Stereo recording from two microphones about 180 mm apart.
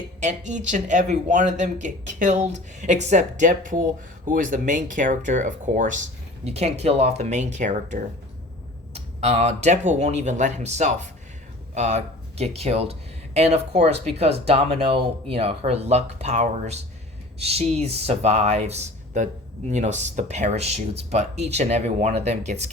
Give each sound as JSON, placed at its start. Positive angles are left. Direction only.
{"t": 0.2, "sound": "speech", "side_deg": -40}